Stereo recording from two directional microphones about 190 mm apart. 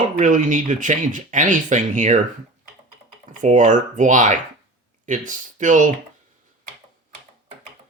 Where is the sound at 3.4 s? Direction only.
40° right (ahead or behind).